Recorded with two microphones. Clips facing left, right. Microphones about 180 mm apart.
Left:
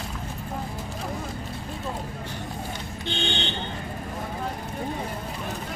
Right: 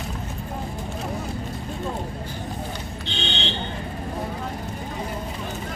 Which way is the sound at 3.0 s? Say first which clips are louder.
Left 3 dB; 50° left (ahead or behind).